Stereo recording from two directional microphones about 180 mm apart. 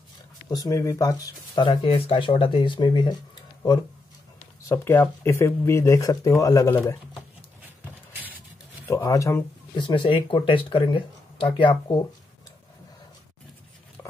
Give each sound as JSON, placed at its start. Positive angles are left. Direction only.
{"t": 0.5, "sound": "speech", "side_deg": 20}
{"t": 4.6, "sound": "speech", "side_deg": 10}
{"t": 8.1, "sound": "a sound", "side_deg": -10}
{"t": 8.8, "sound": "speech", "side_deg": 15}